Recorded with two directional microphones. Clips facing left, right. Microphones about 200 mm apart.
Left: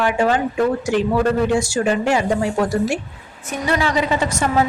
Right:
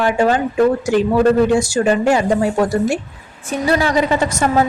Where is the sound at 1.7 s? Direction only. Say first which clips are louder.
Right 3 dB; 40° right (ahead or behind).